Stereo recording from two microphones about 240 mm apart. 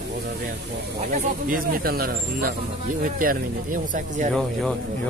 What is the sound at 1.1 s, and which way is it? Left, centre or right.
Speech, right.